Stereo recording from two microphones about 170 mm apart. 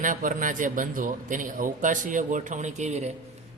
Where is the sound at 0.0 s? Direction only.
50° right (ahead or behind).